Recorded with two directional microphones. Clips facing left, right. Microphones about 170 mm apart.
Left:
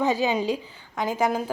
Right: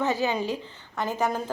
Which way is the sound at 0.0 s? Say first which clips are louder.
Left 3 dB; 15° left (ahead or behind).